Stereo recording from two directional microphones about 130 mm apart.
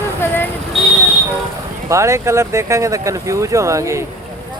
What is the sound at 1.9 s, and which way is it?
Speech, 25° right (ahead or behind).